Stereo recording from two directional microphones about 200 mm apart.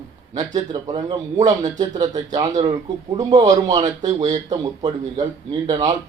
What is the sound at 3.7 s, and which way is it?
Speech, 35° right (ahead or behind).